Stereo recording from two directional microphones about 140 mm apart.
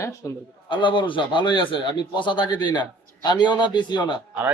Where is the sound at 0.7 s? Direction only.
35° left (ahead or behind).